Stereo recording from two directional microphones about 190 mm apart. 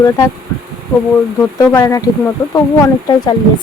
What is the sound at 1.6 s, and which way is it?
Speech, 15° left (ahead or behind).